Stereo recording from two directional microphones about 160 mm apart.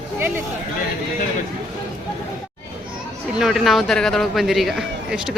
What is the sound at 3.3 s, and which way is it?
A man's voice, centre (ahead or behind).